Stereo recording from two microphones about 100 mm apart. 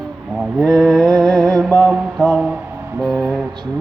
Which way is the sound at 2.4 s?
15° right (ahead or behind).